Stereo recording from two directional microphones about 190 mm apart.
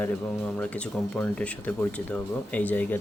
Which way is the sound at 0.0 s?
5° left (ahead or behind).